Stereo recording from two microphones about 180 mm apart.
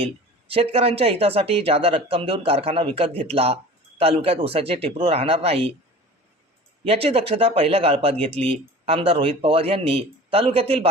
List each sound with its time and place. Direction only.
0.0 s speech: 30° right (ahead or behind)
6.8 s speech: 35° right (ahead or behind)